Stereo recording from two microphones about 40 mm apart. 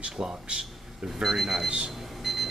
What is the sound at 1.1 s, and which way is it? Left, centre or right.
Speech, centre.